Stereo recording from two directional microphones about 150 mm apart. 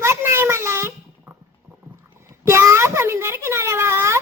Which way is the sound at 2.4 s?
20° right (ahead or behind).